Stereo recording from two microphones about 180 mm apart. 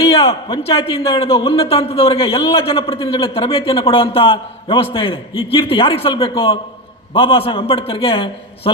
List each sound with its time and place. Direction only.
0.2 s a man's voice: 30° left (ahead or behind)